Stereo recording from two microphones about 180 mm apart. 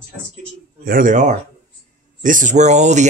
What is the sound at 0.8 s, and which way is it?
Speech, 50° right (ahead or behind).